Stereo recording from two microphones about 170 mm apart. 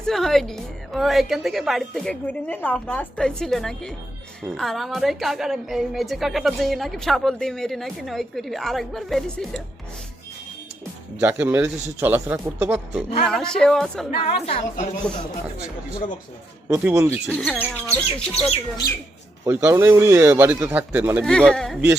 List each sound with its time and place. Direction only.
0.0 s a woman's voice: centre (ahead or behind)
11.2 s a woman's voice: 15° right (ahead or behind)
14.4 s speech: 40° left (ahead or behind)
15.1 s a woman's voice: 5° left (ahead or behind)
16.6 s speech: 15° right (ahead or behind)
17.2 s a woman's voice: 5° left (ahead or behind)
17.8 s chirp: 5° left (ahead or behind)
19.5 s speech: 15° right (ahead or behind)
21.2 s a woman's voice: 5° left (ahead or behind)